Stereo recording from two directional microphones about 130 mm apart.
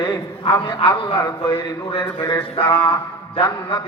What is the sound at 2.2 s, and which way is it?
Mantra, 40° left (ahead or behind).